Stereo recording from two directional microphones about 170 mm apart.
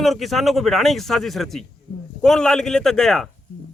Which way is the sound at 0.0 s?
Centre (ahead or behind).